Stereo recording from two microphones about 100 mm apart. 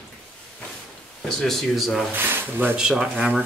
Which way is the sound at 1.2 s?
5° left (ahead or behind).